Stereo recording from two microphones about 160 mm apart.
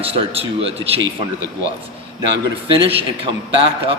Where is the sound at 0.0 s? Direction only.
35° right (ahead or behind).